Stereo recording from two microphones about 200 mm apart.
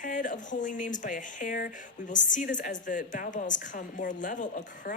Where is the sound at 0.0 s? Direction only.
40° left (ahead or behind).